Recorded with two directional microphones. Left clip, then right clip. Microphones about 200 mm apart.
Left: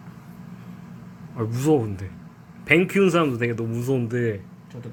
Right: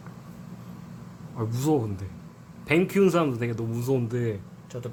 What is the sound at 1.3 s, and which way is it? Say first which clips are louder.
Speech: left 5 dB; 10° left (ahead or behind).